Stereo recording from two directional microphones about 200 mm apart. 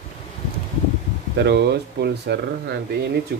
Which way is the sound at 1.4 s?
55° right (ahead or behind).